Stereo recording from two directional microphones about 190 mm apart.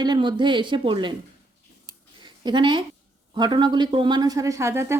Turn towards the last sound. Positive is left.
turn(degrees=-15)  # may be behind; listen again after turning